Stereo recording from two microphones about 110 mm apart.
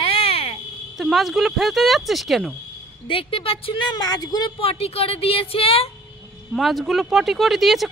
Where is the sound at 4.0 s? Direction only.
40° left (ahead or behind).